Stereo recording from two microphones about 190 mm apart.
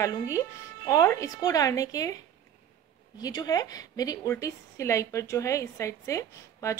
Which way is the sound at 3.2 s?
20° left (ahead or behind).